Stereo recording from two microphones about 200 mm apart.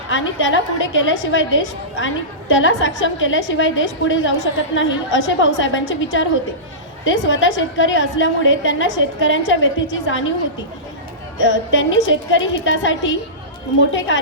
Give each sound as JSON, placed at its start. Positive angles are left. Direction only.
{"t": 0.1, "sound": "a woman's voice", "side_deg": 70}
{"t": 11.4, "sound": "a woman's voice", "side_deg": 70}